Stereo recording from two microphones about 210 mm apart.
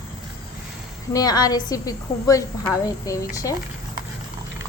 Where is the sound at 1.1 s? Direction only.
20° left (ahead or behind).